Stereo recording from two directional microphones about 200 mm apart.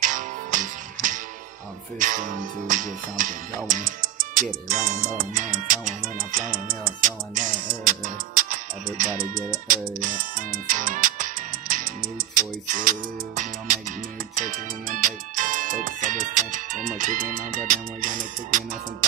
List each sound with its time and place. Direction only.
0.0 s music: 40° right (ahead or behind)
14.3 s music: 40° right (ahead or behind)